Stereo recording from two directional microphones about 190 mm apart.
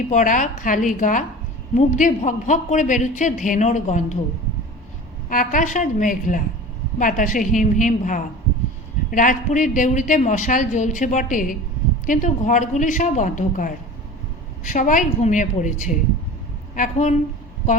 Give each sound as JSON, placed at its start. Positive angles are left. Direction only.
{"t": 0.1, "sound": "a woman's voice", "side_deg": 40}
{"t": 5.3, "sound": "a woman's voice", "side_deg": 45}